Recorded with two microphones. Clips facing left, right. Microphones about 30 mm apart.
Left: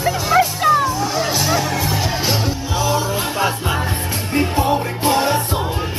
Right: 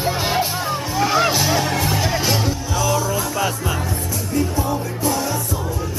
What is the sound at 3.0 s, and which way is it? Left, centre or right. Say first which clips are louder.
Music: left 2 dB; left.